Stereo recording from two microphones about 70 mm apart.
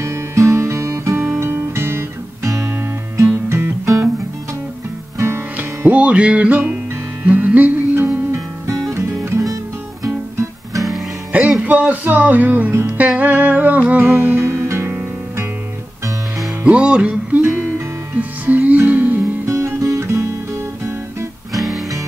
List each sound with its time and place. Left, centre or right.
0.0 s music: right
5.9 s music: centre; by 8.4 s right
8.9 s music: right
11.6 s speech: right
12.8 s music: right
16.6 s music: centre
19.4 s music: right
21.5 s music: centre